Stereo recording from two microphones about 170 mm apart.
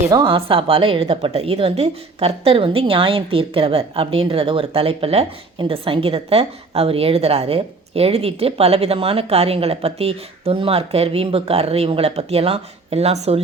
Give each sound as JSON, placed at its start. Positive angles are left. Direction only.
{"t": 0.1, "sound": "a woman's voice", "side_deg": -25}